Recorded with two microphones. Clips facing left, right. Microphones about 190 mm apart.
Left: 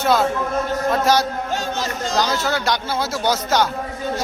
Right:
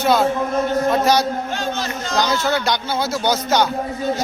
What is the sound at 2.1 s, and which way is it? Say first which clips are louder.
A man's voice: right 2 dB; centre (ahead or behind).